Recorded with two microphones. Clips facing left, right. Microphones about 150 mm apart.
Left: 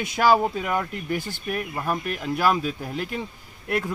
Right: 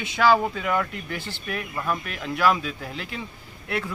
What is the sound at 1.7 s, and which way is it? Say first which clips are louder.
Speech: left 2 dB; 40° left (ahead or behind).